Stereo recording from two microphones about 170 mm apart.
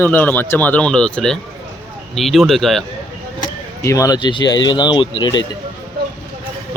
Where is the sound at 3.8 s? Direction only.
20° left (ahead or behind).